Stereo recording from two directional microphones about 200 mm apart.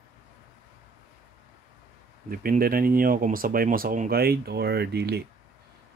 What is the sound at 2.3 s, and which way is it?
Speech, 45° right (ahead or behind).